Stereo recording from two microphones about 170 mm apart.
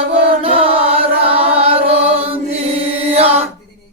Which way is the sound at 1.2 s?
35° right (ahead or behind).